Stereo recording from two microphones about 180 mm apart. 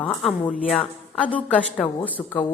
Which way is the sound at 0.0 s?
5° left (ahead or behind).